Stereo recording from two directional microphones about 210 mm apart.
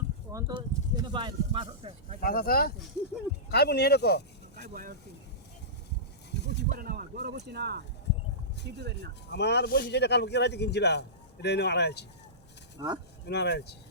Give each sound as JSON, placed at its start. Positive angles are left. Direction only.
{"t": 0.3, "sound": "a sound", "side_deg": -15}
{"t": 2.2, "sound": "a man's voice", "side_deg": 45}
{"t": 4.5, "sound": "speech", "side_deg": -40}
{"t": 6.3, "sound": "a sound", "side_deg": 55}
{"t": 6.7, "sound": "speech", "side_deg": -45}
{"t": 9.3, "sound": "a man's voice", "side_deg": 55}
{"t": 12.8, "sound": "speech", "side_deg": -15}
{"t": 13.2, "sound": "a man's voice", "side_deg": 55}